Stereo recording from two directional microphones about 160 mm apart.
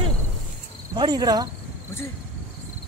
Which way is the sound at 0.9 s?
25° right (ahead or behind).